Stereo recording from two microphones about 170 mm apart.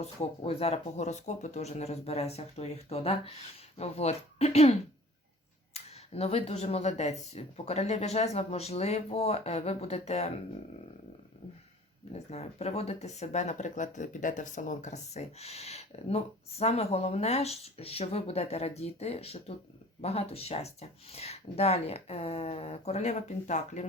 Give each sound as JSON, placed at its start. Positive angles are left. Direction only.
{"t": 0.0, "sound": "speech", "side_deg": 35}
{"t": 5.7, "sound": "speech", "side_deg": 35}
{"t": 12.1, "sound": "speech", "side_deg": 40}